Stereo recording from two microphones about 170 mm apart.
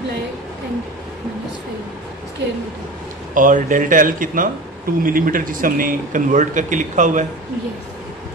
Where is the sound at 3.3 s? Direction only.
50° right (ahead or behind).